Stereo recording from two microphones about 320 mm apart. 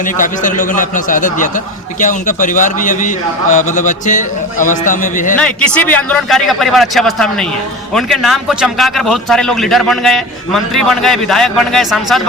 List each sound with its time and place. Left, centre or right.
0.0 s a man's voice: left
5.4 s a man's voice: centre